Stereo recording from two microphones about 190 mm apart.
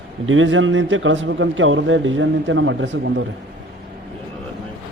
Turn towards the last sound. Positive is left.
turn(degrees=-75)  # may be behind; listen again after turning